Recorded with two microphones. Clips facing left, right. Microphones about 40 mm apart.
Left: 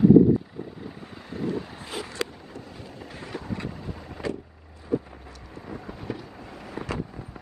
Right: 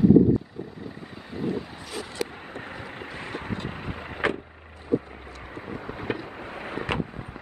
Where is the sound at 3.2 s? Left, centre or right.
Right.